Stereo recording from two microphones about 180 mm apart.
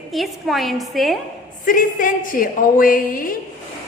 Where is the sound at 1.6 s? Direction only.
50° left (ahead or behind).